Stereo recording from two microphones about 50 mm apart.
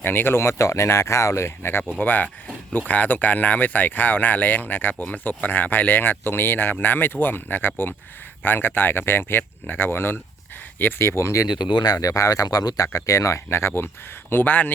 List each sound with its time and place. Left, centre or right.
0.0 s speech: left
0.3 s speech: left
2.0 s speech: left
11.1 s speech: left
11.9 s speech: left
14.4 s speech: left